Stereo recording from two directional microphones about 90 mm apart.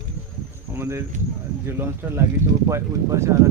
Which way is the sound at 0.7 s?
25° right (ahead or behind).